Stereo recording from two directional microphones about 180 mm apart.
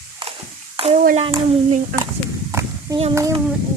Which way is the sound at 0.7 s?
35° right (ahead or behind).